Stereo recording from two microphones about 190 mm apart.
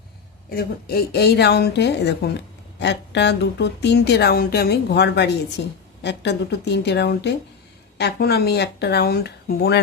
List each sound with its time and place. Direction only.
0.5 s speech: 55° left (ahead or behind)